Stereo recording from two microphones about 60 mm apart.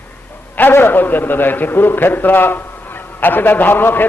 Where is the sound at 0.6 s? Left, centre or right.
Left.